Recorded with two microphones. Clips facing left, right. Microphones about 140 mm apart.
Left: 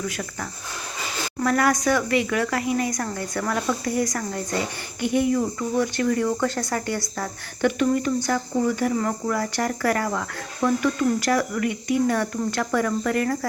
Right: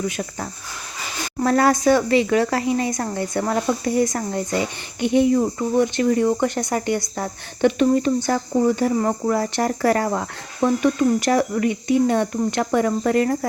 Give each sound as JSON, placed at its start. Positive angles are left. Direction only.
{"t": 0.0, "sound": "speech", "side_deg": -25}